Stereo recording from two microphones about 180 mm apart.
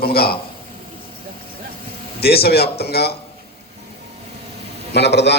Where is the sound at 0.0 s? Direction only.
60° left (ahead or behind).